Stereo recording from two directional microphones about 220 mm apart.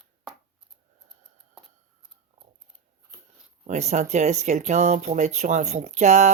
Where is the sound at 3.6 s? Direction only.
30° right (ahead or behind).